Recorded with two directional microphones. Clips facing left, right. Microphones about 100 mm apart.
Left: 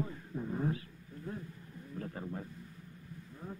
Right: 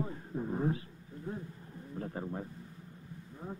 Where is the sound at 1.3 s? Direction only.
25° right (ahead or behind).